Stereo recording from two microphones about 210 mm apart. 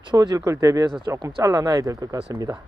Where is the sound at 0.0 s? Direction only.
20° right (ahead or behind).